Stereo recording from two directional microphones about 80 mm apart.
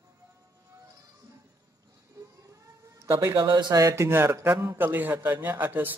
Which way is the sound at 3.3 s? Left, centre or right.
Right.